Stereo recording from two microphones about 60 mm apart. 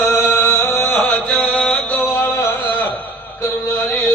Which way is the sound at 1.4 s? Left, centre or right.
Centre.